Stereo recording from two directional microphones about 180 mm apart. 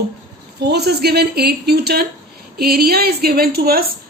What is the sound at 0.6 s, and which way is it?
A woman's voice, 65° right (ahead or behind).